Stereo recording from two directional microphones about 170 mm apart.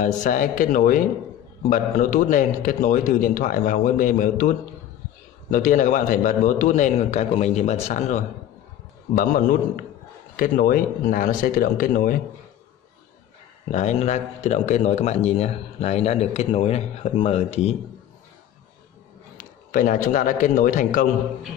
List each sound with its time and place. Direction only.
0.0 s a man's voice: 50° left (ahead or behind)
9.1 s a man's voice: 50° left (ahead or behind)
13.7 s a man's voice: 45° left (ahead or behind)
19.3 s a man's voice: 50° left (ahead or behind)